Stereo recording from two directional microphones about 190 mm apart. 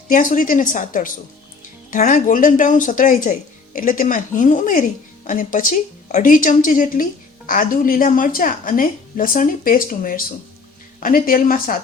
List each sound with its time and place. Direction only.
0.1 s speech: 45° left (ahead or behind)